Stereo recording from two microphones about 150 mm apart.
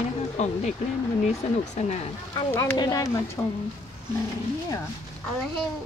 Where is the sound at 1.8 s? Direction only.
50° left (ahead or behind).